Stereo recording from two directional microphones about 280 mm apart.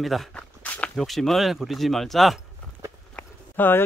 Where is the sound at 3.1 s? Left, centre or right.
Centre.